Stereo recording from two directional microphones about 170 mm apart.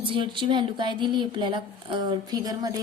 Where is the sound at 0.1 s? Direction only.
30° right (ahead or behind).